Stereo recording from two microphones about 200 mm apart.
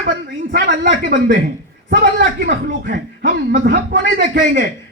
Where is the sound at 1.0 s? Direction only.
45° right (ahead or behind).